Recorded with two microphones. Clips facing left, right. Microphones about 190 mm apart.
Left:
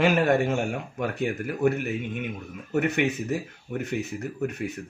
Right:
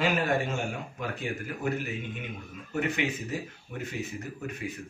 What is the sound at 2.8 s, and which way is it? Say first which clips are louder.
Speech: left 2 dB; 60° left (ahead or behind).